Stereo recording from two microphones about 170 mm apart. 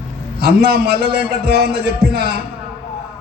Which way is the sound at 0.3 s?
70° right (ahead or behind).